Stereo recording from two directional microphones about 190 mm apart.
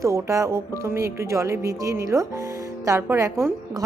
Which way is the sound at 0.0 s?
15° right (ahead or behind).